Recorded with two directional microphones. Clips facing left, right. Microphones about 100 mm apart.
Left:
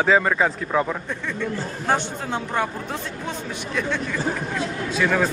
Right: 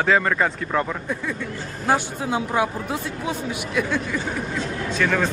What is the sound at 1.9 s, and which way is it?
Speech, 10° right (ahead or behind).